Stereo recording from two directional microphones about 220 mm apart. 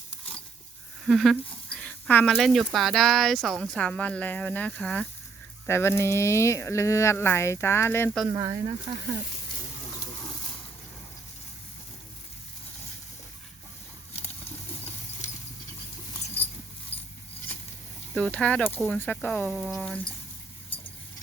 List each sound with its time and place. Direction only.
1.0 s a sound: centre (ahead or behind)
2.3 s speech: centre (ahead or behind)
8.3 s speech: 15° right (ahead or behind)
16.9 s horse: 25° left (ahead or behind)
18.1 s speech: 5° left (ahead or behind)